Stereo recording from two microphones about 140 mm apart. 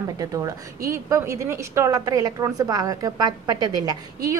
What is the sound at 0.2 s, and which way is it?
A woman's voice, 25° right (ahead or behind).